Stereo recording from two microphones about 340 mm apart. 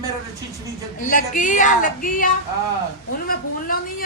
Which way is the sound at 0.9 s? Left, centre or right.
Left.